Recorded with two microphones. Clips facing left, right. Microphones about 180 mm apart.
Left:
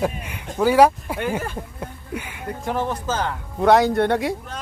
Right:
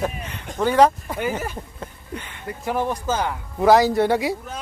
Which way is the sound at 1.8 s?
10° left (ahead or behind).